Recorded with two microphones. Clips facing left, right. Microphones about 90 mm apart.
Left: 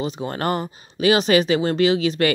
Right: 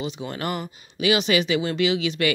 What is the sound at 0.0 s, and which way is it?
Speech, 40° left (ahead or behind).